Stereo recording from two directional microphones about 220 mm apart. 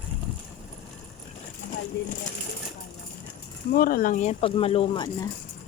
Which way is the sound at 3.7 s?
40° left (ahead or behind).